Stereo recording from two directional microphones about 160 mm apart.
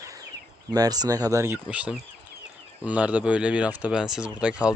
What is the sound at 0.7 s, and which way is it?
Speech, 25° right (ahead or behind).